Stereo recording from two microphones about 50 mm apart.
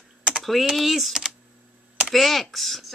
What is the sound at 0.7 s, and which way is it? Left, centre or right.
A woman's voice, centre.